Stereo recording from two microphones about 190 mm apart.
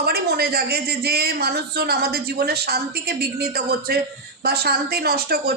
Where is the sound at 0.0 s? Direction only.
55° right (ahead or behind).